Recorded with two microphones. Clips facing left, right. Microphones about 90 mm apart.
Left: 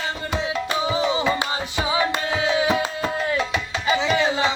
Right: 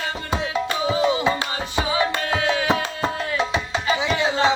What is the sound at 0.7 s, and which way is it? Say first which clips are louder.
Music: right 1 dB; 15° left (ahead or behind).